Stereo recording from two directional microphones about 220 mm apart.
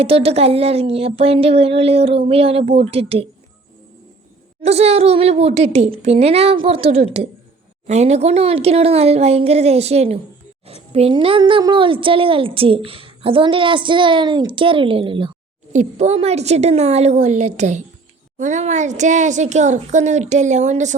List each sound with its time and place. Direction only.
0.0 s a woman's voice: 25° right (ahead or behind)
4.6 s a woman's voice: 30° right (ahead or behind)